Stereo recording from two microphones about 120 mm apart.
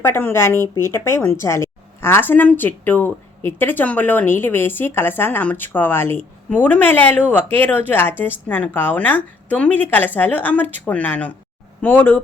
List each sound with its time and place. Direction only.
0.0 s a woman's voice: 20° left (ahead or behind)